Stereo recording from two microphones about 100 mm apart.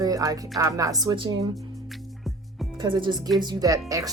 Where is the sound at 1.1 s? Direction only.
55° right (ahead or behind).